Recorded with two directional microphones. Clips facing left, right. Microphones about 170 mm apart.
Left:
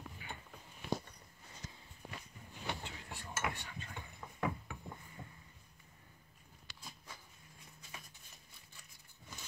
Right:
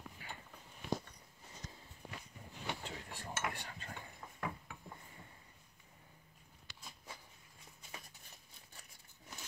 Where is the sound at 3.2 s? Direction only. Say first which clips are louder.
Left 2 dB; 40° right (ahead or behind).